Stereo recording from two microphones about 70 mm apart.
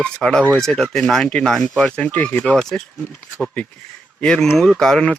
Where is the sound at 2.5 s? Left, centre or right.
Centre.